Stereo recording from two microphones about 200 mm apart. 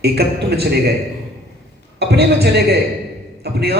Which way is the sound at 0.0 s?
55° right (ahead or behind).